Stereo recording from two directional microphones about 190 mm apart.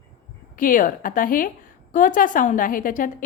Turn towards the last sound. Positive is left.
turn(degrees=45)  # may be behind; listen again after turning